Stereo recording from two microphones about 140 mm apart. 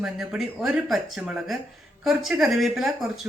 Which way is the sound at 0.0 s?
5° right (ahead or behind).